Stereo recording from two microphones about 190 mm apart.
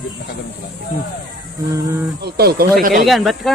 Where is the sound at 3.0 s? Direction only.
Centre (ahead or behind).